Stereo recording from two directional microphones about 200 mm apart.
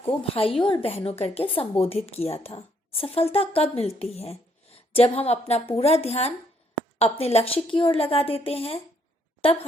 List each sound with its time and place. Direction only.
0.0 s a woman's voice: 30° left (ahead or behind)